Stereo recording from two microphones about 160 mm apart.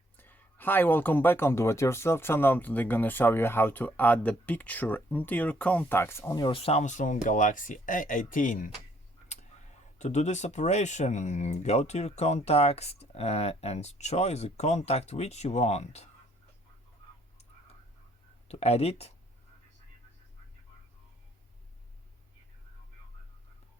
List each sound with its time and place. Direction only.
0.2 s speech: 10° left (ahead or behind)
6.4 s speech: 35° left (ahead or behind); by 8.7 s 55° left (ahead or behind)
10.0 s speech: 45° left (ahead or behind)
18.4 s speech: 40° left (ahead or behind)